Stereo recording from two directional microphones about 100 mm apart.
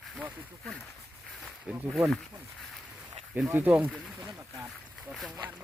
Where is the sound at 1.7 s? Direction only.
15° right (ahead or behind).